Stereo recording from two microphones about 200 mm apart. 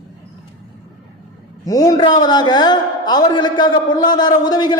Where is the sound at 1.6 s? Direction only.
20° left (ahead or behind).